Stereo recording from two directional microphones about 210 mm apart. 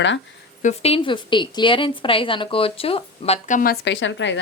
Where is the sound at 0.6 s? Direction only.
30° left (ahead or behind).